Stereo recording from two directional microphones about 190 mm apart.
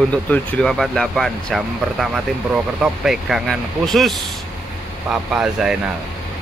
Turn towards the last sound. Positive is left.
turn(degrees=-5)  # may be behind; listen again after turning